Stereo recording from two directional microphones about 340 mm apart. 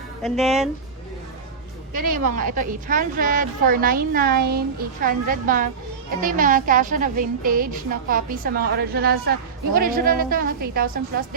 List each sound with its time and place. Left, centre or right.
0.2 s speech: centre
1.9 s a woman's voice: right